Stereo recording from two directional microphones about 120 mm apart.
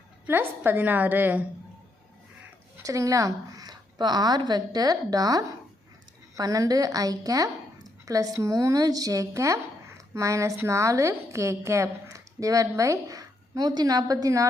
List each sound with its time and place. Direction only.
0.3 s a woman's voice: 15° right (ahead or behind)
2.8 s a woman's voice: 30° right (ahead or behind)